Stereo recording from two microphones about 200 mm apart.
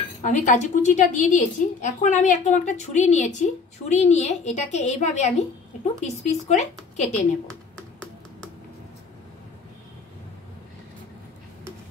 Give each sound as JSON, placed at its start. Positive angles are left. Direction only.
{"t": 0.2, "sound": "a woman's voice", "side_deg": 35}